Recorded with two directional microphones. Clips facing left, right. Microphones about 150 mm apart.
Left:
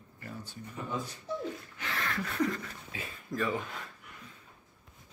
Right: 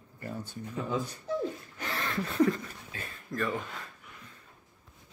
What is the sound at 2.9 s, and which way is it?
Speech, 5° left (ahead or behind).